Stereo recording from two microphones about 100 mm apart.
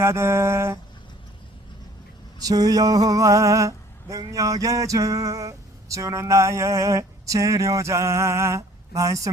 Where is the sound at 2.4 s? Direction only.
40° right (ahead or behind).